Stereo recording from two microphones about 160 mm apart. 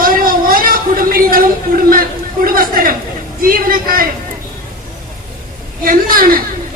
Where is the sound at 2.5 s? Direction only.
65° right (ahead or behind).